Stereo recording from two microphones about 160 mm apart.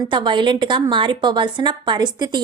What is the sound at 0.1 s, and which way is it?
A woman's voice, 30° right (ahead or behind).